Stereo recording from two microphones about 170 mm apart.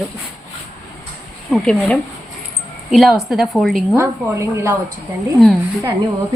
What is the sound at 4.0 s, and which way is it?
Speech, 15° right (ahead or behind).